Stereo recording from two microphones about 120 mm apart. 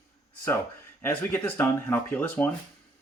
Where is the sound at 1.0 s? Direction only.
15° left (ahead or behind).